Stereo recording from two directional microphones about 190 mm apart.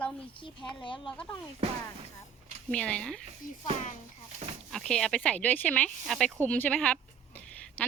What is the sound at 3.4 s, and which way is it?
Speech, 45° left (ahead or behind).